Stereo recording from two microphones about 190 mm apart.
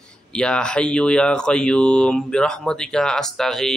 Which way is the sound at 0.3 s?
5° left (ahead or behind).